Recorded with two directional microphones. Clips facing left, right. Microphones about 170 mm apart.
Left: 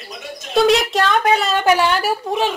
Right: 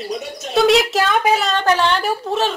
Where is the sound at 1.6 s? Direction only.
10° left (ahead or behind).